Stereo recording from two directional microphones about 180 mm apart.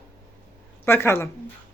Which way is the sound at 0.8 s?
15° left (ahead or behind).